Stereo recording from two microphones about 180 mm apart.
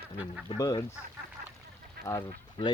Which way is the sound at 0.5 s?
20° left (ahead or behind).